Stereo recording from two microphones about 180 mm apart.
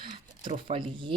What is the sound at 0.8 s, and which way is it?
Speech, 25° right (ahead or behind).